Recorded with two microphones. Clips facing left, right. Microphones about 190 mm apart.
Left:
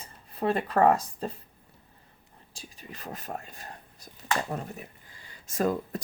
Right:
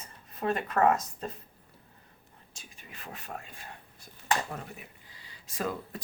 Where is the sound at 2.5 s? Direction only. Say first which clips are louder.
Left 6 dB; 35° left (ahead or behind).